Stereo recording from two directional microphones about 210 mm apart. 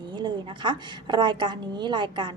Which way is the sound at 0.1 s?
20° right (ahead or behind).